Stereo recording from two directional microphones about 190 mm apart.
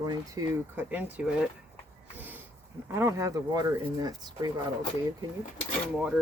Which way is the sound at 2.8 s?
15° right (ahead or behind).